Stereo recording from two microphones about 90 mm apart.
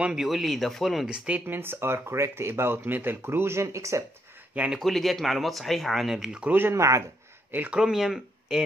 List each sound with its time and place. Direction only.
0.0 s speech: 5° right (ahead or behind)
1.1 s speech: 10° right (ahead or behind)
1.5 s speech: 25° right (ahead or behind)
4.7 s speech: centre (ahead or behind)
6.5 s speech: 30° right (ahead or behind)
7.5 s speech: 20° right (ahead or behind)
7.8 s speech: 5° right (ahead or behind)